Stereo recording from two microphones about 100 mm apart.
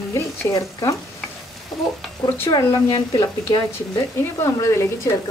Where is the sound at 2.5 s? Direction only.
45° left (ahead or behind).